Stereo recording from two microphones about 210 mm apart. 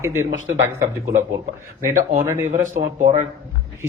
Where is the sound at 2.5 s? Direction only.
35° right (ahead or behind).